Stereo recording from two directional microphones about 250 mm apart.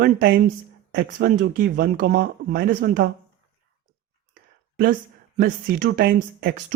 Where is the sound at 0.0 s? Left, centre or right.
Right.